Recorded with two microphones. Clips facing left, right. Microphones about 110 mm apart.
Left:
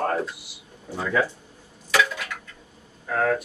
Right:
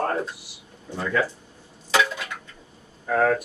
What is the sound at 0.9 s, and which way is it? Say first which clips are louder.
Speech: left 1 dB; 5° left (ahead or behind).